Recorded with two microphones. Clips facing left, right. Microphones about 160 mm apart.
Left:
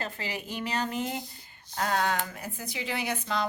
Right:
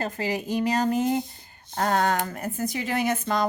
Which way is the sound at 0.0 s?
40° right (ahead or behind).